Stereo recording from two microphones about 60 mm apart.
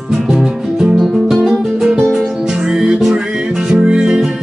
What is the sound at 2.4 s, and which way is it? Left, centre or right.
Music, centre.